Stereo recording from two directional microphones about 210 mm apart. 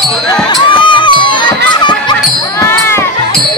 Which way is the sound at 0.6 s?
25° left (ahead or behind).